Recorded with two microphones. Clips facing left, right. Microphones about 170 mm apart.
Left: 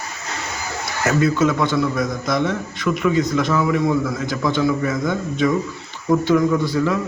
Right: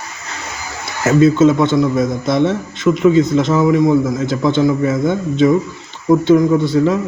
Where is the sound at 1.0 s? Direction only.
25° right (ahead or behind).